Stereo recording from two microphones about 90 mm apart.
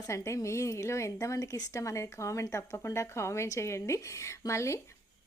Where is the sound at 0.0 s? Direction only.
35° left (ahead or behind).